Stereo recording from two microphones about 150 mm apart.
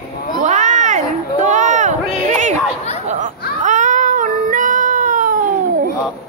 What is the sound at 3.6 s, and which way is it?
Cat, 55° right (ahead or behind).